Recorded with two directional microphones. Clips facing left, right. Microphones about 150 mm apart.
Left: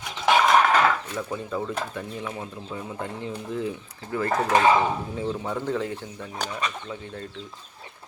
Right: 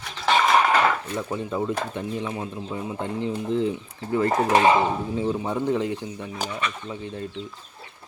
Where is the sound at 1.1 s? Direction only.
20° right (ahead or behind).